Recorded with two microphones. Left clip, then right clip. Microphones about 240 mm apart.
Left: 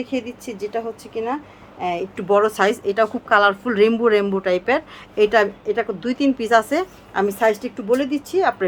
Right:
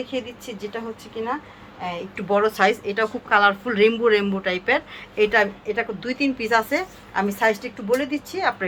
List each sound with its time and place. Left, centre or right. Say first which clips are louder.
0.1 s a woman's voice: left 3 dB; left